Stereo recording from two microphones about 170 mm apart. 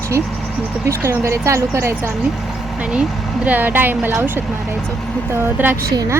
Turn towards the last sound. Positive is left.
turn(degrees=-10)  # may be behind; listen again after turning